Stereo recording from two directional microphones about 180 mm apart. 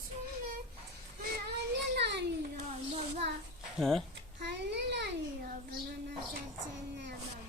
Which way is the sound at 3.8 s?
Centre (ahead or behind).